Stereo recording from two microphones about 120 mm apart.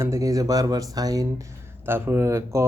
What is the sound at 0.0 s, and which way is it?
Speech, 25° right (ahead or behind).